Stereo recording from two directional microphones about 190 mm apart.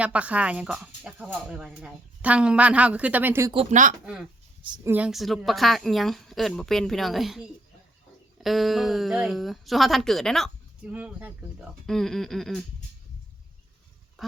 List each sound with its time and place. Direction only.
0.0 s speech: 5° right (ahead or behind)
3.5 s speech: 35° right (ahead or behind)
4.6 s a woman's voice: 25° right (ahead or behind)
4.9 s a woman's voice: 5° right (ahead or behind)
14.2 s duck: centre (ahead or behind)